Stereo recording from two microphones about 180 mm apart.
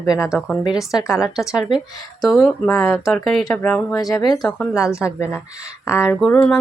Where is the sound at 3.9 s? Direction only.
20° left (ahead or behind).